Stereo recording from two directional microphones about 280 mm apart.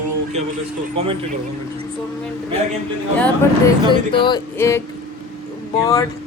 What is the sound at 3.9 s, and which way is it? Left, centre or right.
Speech, centre.